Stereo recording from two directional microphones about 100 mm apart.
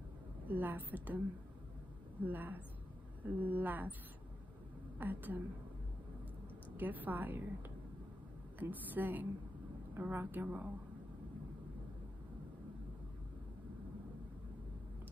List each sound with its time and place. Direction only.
0.5 s a woman's voice: 20° right (ahead or behind)
2.2 s a woman's voice: 20° right (ahead or behind)
4.9 s a woman's voice: 20° right (ahead or behind)
6.8 s a woman's voice: 20° right (ahead or behind)
8.5 s a woman's voice: 20° right (ahead or behind)